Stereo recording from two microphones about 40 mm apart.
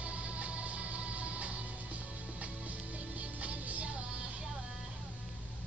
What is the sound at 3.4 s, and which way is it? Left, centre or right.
Music, right.